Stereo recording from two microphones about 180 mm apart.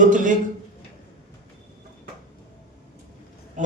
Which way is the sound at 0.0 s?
45° right (ahead or behind).